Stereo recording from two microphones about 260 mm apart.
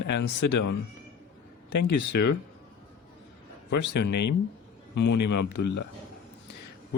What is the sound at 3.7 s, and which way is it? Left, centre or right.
Speech, left.